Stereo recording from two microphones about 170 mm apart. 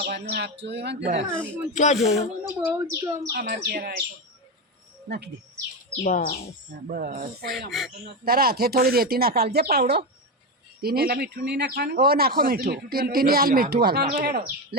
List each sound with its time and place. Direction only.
0.0 s speech: 75° right (ahead or behind)
1.7 s speech: 45° left (ahead or behind)
2.4 s speech: 15° right (ahead or behind)
3.3 s speech: 60° right (ahead or behind)
5.0 s speech: 75° right (ahead or behind)
6.0 s speech: 55° left (ahead or behind)
6.9 s speech: 60° right (ahead or behind)
7.7 s speech: centre (ahead or behind)
8.2 s speech: 60° right (ahead or behind)